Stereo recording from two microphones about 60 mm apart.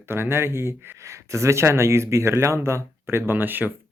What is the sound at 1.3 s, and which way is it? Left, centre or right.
Speech, right.